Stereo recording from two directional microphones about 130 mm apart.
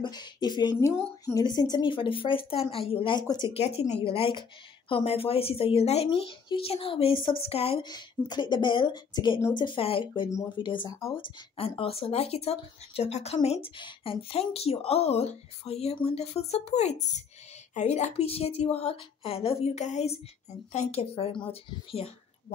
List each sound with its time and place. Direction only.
0.0 s speech: 35° left (ahead or behind)
3.5 s speech: 55° left (ahead or behind)
7.8 s speech: 35° left (ahead or behind); by 13.7 s 55° left (ahead or behind)
13.7 s speech: 40° left (ahead or behind)